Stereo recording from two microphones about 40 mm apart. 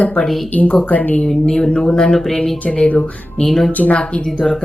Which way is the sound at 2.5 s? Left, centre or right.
Left.